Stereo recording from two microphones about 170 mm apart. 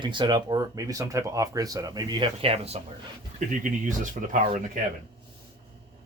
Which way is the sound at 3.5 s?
50° right (ahead or behind).